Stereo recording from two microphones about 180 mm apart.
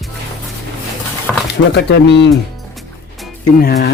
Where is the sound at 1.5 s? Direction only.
70° left (ahead or behind).